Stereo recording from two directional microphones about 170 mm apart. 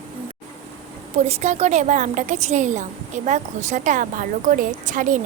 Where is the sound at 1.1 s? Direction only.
40° right (ahead or behind).